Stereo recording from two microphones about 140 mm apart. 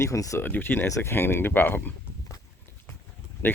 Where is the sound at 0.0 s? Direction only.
20° left (ahead or behind).